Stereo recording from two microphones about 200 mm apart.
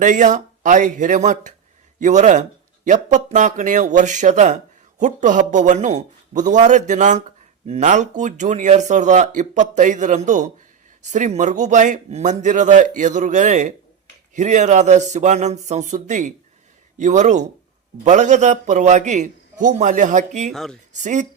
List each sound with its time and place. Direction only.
0.0 s speech: 40° right (ahead or behind)
20.5 s speech: centre (ahead or behind)
20.9 s speech: 35° right (ahead or behind)